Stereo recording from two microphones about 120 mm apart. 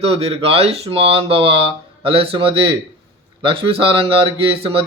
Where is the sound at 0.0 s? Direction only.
55° right (ahead or behind).